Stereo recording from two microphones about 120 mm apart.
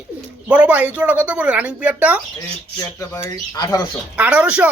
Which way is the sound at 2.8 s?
20° left (ahead or behind).